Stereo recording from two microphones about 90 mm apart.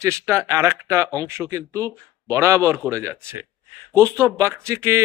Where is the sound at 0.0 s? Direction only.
30° right (ahead or behind).